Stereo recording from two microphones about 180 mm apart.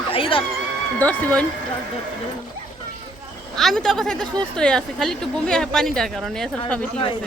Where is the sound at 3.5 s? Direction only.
Centre (ahead or behind).